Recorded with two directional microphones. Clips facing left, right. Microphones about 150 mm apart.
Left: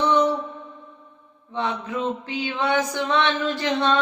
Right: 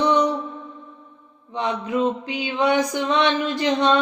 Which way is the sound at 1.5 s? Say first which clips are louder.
Right 4 dB; 15° right (ahead or behind).